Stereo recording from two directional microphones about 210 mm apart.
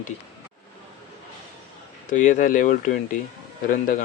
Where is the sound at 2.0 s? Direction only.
35° left (ahead or behind).